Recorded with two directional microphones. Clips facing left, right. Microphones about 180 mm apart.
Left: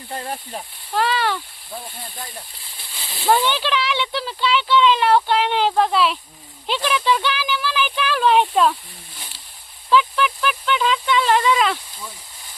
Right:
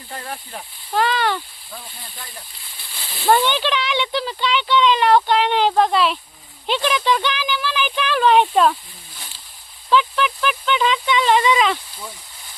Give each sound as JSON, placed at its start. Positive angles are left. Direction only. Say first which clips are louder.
{"t": 0.1, "sound": "speech", "louder": "left 3 dB", "side_deg": 35}
{"t": 0.9, "sound": "speech", "louder": "right 1 dB", "side_deg": 0}
{"t": 3.2, "sound": "speech", "louder": "right 1 dB", "side_deg": 0}
{"t": 9.9, "sound": "a sound", "louder": "even", "side_deg": 0}